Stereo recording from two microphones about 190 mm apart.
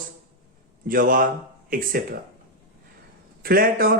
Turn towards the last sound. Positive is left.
turn(degrees=-50)  # may be behind; listen again after turning